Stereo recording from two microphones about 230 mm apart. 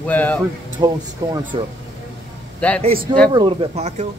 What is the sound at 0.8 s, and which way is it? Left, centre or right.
Speech, centre.